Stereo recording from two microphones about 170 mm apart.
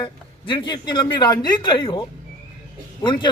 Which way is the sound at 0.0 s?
30° left (ahead or behind).